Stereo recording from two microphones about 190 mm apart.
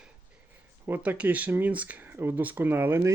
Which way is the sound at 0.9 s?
10° right (ahead or behind).